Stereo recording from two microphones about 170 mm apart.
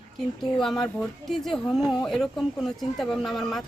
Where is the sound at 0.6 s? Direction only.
Centre (ahead or behind).